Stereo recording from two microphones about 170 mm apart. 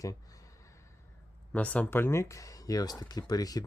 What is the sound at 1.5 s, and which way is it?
Speech, 10° left (ahead or behind).